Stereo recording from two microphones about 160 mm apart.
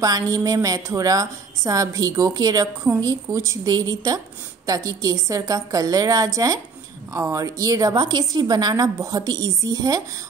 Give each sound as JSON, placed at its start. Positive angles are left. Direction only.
{"t": 0.0, "sound": "a woman's voice", "side_deg": -25}